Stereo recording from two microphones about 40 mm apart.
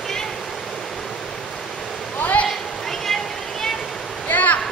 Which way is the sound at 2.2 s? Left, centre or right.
Left.